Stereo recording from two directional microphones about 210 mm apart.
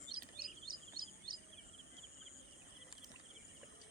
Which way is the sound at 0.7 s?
45° right (ahead or behind).